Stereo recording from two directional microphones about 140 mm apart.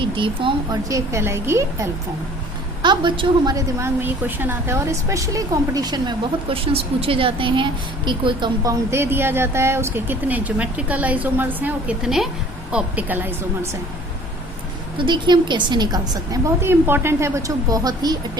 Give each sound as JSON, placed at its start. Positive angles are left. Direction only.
{"t": 0.0, "sound": "a woman's voice", "side_deg": -35}
{"t": 0.9, "sound": "a woman's voice", "side_deg": -20}
{"t": 2.8, "sound": "a woman's voice", "side_deg": -35}
{"t": 6.7, "sound": "a woman's voice", "side_deg": -40}
{"t": 8.6, "sound": "speech", "side_deg": -20}
{"t": 14.9, "sound": "a woman's voice", "side_deg": -35}
{"t": 16.6, "sound": "a woman's voice", "side_deg": -15}